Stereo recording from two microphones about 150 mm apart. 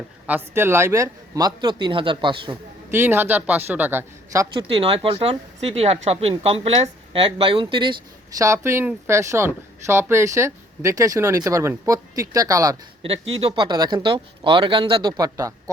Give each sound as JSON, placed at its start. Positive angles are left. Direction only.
{"t": 0.3, "sound": "speech", "side_deg": -15}
{"t": 2.9, "sound": "a woman's voice", "side_deg": -15}
{"t": 4.5, "sound": "speech", "side_deg": -40}
{"t": 8.4, "sound": "speech", "side_deg": -20}
{"t": 13.0, "sound": "speech", "side_deg": -40}